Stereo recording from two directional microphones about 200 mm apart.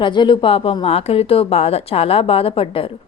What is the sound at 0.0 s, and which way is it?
A woman's voice, 25° left (ahead or behind).